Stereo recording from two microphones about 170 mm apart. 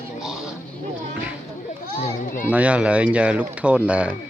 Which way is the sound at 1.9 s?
45° left (ahead or behind).